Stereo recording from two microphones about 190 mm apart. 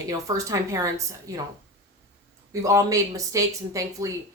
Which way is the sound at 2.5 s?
15° right (ahead or behind).